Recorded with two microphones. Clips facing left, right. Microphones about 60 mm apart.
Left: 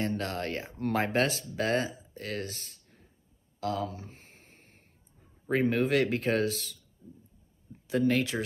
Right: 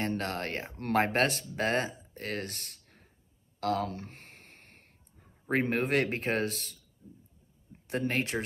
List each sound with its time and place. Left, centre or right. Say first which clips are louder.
0.0 s speech: left 1 dB; right
3.6 s a sound: right 2 dB; right
5.5 s speech: left 2 dB; right
7.9 s speech: left 4 dB; right